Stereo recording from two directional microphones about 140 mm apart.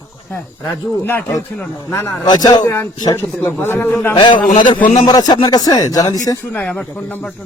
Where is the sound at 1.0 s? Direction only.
15° left (ahead or behind).